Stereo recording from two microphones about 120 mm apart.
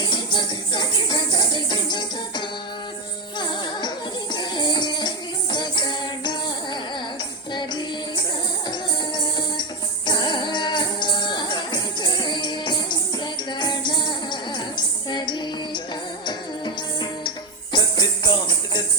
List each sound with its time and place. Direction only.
0.0 s a sound: 40° left (ahead or behind)
3.3 s music: 40° left (ahead or behind)
7.5 s music: 40° left (ahead or behind)